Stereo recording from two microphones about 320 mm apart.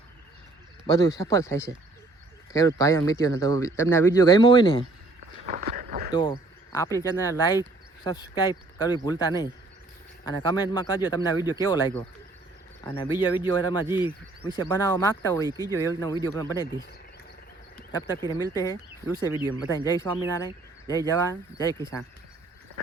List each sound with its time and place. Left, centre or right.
0.9 s speech: centre
5.5 s a sound: right
6.7 s speech: centre
15.4 s speech: centre
15.7 s speech: centre
18.5 s speech: centre